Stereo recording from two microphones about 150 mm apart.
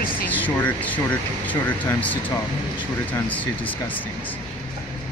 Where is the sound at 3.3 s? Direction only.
10° left (ahead or behind).